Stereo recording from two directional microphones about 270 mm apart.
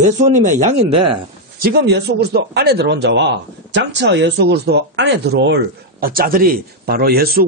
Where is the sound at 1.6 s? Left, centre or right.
Right.